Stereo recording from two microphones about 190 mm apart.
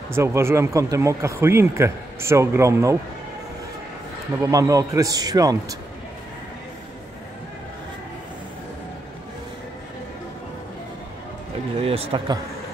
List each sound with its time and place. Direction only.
0.1 s speech: 15° right (ahead or behind)
4.4 s speech: 15° right (ahead or behind)
11.8 s speech: 30° right (ahead or behind)